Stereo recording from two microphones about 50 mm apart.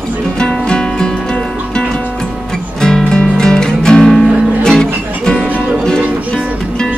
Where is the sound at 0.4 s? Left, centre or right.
Centre.